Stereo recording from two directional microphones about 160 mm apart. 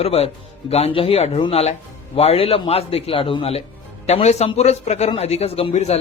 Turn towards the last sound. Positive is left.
turn(degrees=40)  # may be behind; listen again after turning